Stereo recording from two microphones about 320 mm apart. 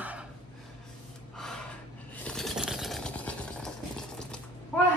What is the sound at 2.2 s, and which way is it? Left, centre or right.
Toothbrush, centre.